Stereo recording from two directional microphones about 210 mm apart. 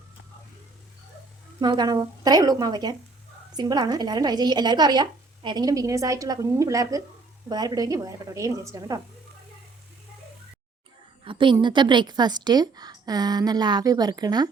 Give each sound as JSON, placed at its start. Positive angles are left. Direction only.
{"t": 1.6, "sound": "a woman's voice", "side_deg": -20}
{"t": 11.3, "sound": "a woman's voice", "side_deg": -25}